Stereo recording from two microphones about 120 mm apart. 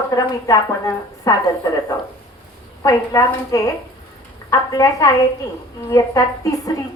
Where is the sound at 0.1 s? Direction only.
30° left (ahead or behind).